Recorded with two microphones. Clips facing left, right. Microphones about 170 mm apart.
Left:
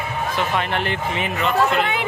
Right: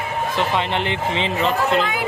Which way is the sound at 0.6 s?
20° right (ahead or behind).